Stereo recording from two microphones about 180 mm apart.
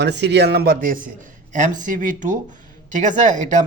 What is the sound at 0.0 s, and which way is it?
A man's voice, 70° right (ahead or behind).